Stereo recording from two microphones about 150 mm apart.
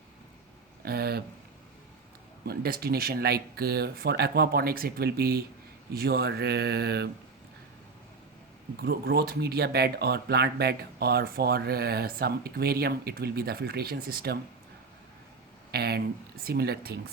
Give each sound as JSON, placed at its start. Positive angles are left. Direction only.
{"t": 0.9, "sound": "speech", "side_deg": -90}
{"t": 2.4, "sound": "speech", "side_deg": -90}
{"t": 8.8, "sound": "speech", "side_deg": -90}
{"t": 15.7, "sound": "speech", "side_deg": -90}